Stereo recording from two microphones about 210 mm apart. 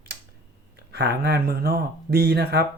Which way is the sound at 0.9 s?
50° right (ahead or behind).